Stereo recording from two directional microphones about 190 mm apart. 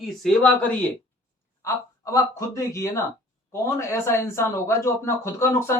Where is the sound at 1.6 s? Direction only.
15° left (ahead or behind).